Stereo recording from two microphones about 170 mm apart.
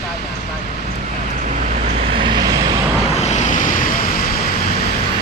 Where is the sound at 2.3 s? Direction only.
25° right (ahead or behind).